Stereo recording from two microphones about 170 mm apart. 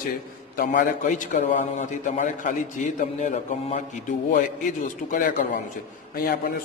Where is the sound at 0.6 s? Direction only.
50° left (ahead or behind).